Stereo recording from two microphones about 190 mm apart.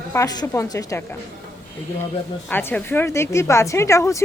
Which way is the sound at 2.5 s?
10° left (ahead or behind).